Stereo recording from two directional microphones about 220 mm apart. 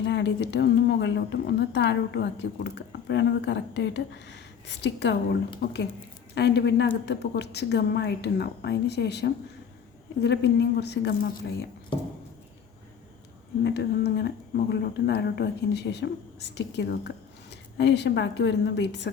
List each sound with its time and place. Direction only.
0.0 s speech: 50° left (ahead or behind)
13.7 s speech: 50° left (ahead or behind)